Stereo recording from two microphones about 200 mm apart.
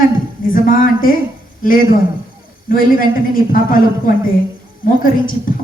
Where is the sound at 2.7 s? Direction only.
45° left (ahead or behind).